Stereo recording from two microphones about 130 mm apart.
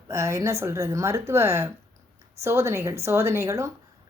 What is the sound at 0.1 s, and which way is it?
A woman's voice, 20° right (ahead or behind).